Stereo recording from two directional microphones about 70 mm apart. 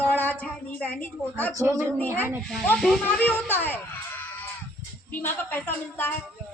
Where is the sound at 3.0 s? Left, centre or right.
Left.